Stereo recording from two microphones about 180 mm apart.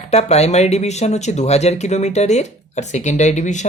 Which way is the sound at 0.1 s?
35° left (ahead or behind).